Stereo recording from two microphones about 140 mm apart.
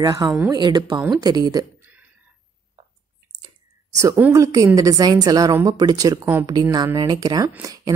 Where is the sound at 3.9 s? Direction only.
25° right (ahead or behind).